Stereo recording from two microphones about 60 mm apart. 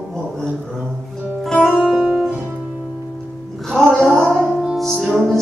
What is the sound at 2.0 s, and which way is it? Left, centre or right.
Music, centre.